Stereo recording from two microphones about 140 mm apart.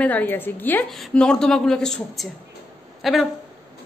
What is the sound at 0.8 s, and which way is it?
A woman's voice, centre (ahead or behind).